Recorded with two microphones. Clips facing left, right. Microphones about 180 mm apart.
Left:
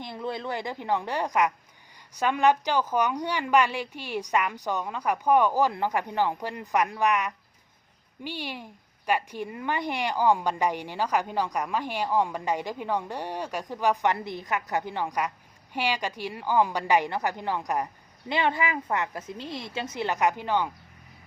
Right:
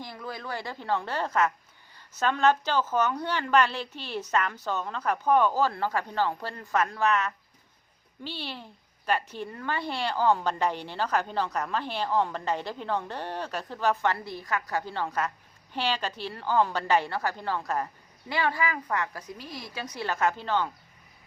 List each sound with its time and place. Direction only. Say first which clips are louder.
0.0 s a woman's voice: left 5 dB; 25° left (ahead or behind)